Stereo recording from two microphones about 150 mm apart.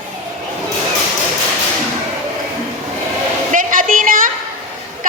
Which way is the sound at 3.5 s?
65° right (ahead or behind).